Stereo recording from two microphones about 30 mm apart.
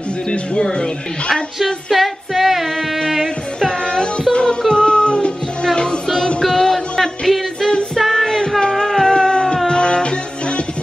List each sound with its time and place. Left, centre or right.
0.3 s speech: left
1.3 s a sound: centre
4.3 s music: left
6.4 s music: centre
9.1 s music: left